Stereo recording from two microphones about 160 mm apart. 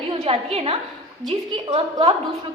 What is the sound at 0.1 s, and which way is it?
A woman's voice, 40° right (ahead or behind).